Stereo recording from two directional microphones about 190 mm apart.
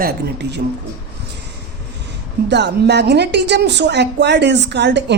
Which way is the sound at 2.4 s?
65° right (ahead or behind).